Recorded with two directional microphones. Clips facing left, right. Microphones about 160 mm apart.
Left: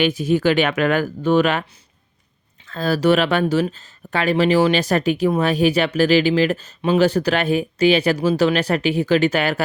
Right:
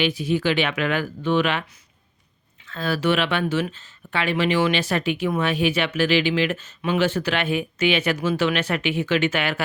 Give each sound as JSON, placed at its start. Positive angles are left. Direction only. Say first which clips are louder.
{"t": 0.0, "sound": "speech", "louder": "left 5 dB", "side_deg": 45}
{"t": 2.6, "sound": "speech", "louder": "left 5 dB", "side_deg": 40}